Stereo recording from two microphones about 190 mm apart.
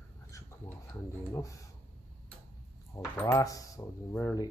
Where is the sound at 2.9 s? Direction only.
15° left (ahead or behind).